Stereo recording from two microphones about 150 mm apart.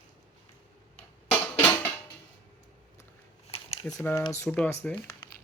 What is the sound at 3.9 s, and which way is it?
Speech, 15° left (ahead or behind).